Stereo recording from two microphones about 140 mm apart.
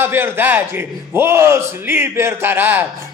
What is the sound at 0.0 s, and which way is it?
A man's voice, 15° right (ahead or behind).